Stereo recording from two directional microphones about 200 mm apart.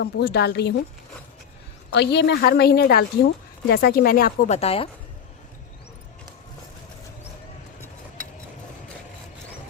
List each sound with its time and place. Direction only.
0.0 s a woman's voice: 55° left (ahead or behind)
1.9 s a woman's voice: 60° left (ahead or behind); by 4.9 s 30° left (ahead or behind)